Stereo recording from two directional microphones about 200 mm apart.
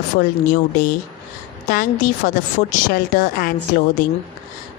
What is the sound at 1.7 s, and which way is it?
A woman's voice, 45° left (ahead or behind).